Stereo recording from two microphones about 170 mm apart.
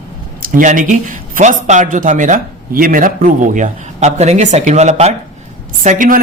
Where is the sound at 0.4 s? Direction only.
50° right (ahead or behind).